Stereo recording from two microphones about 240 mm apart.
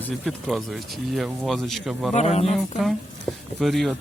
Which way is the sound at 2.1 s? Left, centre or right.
Left.